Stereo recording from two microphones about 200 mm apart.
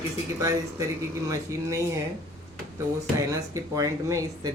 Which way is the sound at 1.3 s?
15° right (ahead or behind).